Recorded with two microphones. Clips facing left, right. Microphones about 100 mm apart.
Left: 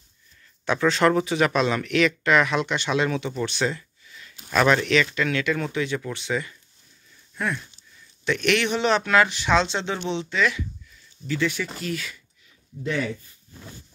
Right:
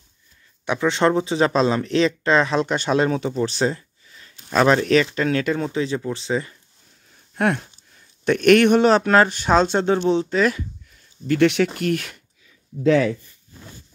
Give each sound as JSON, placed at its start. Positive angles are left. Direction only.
{"t": 0.7, "sound": "speech", "side_deg": -20}
{"t": 7.1, "sound": "a sound", "side_deg": -60}
{"t": 8.3, "sound": "speech", "side_deg": -45}
{"t": 11.2, "sound": "speech", "side_deg": -65}